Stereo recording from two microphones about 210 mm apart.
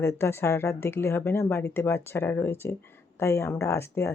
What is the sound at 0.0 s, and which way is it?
Speech, 10° left (ahead or behind).